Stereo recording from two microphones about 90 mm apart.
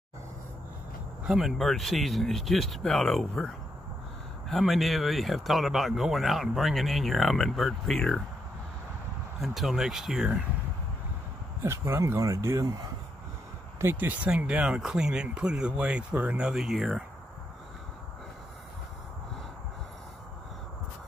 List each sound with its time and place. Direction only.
1.2 s speech: 5° right (ahead or behind)
9.4 s speech: centre (ahead or behind)
11.6 s speech: 30° right (ahead or behind)
13.9 s speech: 15° right (ahead or behind)